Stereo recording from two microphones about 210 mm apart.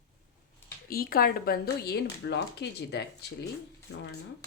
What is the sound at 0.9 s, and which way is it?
Speech, 45° left (ahead or behind).